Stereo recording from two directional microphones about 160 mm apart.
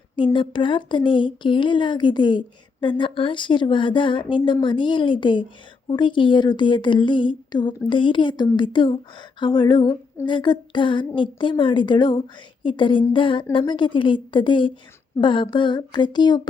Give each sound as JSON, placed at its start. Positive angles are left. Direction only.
{"t": 0.3, "sound": "a woman's voice", "side_deg": 30}